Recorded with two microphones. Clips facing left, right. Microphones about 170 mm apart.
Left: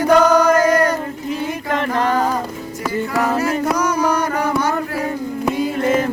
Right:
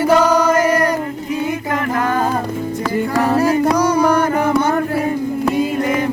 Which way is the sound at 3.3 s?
35° right (ahead or behind).